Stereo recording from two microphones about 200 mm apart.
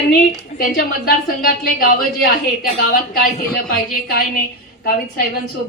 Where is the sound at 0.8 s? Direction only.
50° left (ahead or behind).